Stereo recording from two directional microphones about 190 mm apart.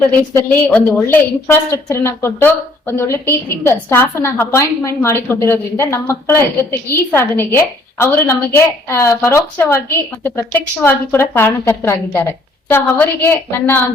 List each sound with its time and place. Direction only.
0.3 s a woman's voice: 10° left (ahead or behind)